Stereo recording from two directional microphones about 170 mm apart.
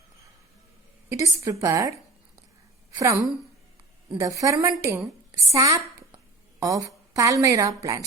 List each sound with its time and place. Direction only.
1.1 s a woman's voice: 20° right (ahead or behind)
3.0 s a woman's voice: 15° right (ahead or behind)
5.5 s a sound: 20° right (ahead or behind)
6.6 s a woman's voice: 20° right (ahead or behind)